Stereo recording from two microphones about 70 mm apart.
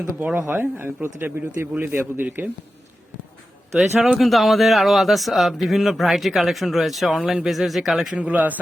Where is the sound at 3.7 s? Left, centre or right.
Centre.